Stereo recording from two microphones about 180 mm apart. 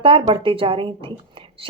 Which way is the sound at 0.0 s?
30° right (ahead or behind).